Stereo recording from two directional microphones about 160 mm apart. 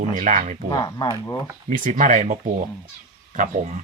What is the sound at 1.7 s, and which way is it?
Speech, 55° right (ahead or behind).